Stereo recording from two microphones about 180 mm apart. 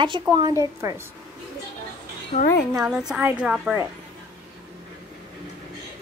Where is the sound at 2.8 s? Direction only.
5° right (ahead or behind).